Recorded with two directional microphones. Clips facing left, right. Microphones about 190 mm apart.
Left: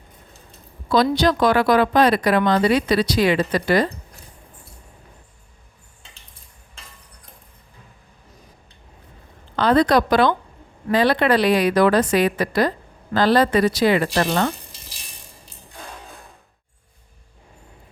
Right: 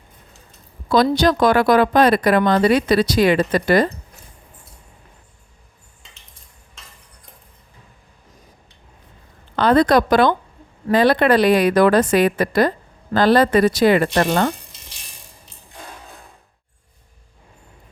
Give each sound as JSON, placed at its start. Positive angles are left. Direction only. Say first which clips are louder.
{"t": 0.9, "sound": "speech", "louder": "right 2 dB", "side_deg": -45}
{"t": 9.6, "sound": "speech", "louder": "right 2 dB", "side_deg": -50}